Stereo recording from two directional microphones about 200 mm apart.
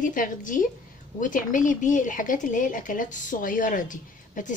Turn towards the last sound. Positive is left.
turn(degrees=40)  # may be behind; listen again after turning